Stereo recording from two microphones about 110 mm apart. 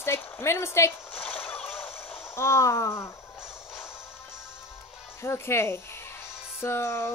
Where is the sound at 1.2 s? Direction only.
15° left (ahead or behind).